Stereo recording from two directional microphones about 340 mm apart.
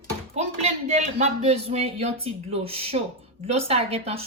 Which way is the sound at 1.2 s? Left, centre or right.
Centre.